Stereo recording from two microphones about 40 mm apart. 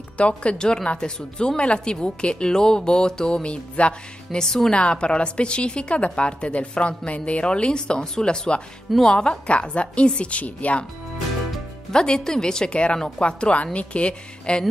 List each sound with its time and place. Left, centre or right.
0.2 s a woman's voice: left
3.4 s a woman's voice: left
4.4 s speech: centre
4.7 s a woman's voice: left
11.9 s a woman's voice: centre